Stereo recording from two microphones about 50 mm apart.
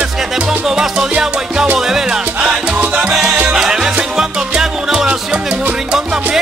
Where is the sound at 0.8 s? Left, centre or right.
Centre.